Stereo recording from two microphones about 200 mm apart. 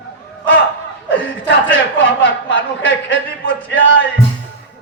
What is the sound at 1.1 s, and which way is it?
A man's voice, 70° left (ahead or behind).